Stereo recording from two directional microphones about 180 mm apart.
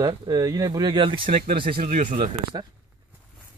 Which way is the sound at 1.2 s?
50° right (ahead or behind).